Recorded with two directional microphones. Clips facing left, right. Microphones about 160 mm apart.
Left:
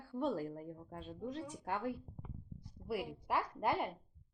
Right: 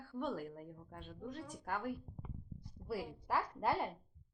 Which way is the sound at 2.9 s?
15° left (ahead or behind).